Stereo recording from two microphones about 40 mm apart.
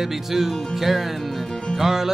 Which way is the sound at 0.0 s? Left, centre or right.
Centre.